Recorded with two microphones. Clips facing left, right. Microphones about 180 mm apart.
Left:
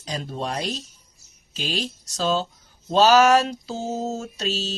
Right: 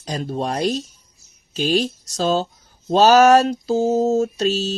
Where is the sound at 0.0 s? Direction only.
45° right (ahead or behind).